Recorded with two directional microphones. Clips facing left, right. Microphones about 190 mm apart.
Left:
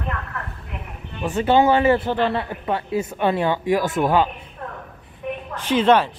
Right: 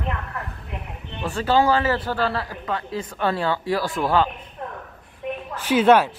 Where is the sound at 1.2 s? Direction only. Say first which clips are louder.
Left 3 dB; 20° left (ahead or behind).